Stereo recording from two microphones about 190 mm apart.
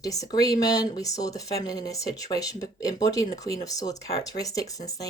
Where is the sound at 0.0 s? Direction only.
20° left (ahead or behind).